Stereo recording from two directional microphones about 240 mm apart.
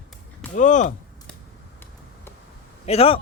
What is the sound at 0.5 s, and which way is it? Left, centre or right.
Speech, left.